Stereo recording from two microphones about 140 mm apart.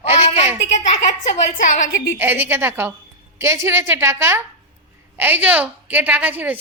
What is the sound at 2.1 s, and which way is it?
A woman's voice, 15° right (ahead or behind).